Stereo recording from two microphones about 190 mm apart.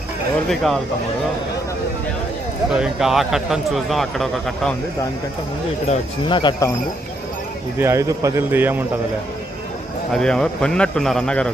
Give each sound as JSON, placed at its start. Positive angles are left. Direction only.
{"t": 0.5, "sound": "speech", "side_deg": 0}
{"t": 2.6, "sound": "speech", "side_deg": -5}
{"t": 5.9, "sound": "speech", "side_deg": 25}
{"t": 7.8, "sound": "speech", "side_deg": -15}
{"t": 10.1, "sound": "speech", "side_deg": 5}